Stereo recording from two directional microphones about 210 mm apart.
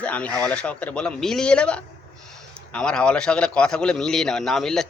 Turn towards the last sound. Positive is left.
turn(degrees=0)  # may be behind; listen again after turning